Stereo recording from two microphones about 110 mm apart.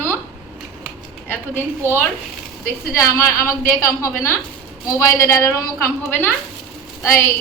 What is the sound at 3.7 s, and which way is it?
A woman's voice, 25° left (ahead or behind).